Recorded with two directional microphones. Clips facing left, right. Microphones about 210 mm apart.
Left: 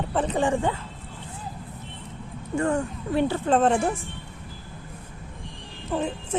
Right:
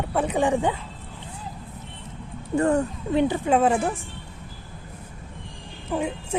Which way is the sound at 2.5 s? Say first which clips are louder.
Right 3 dB; 35° right (ahead or behind).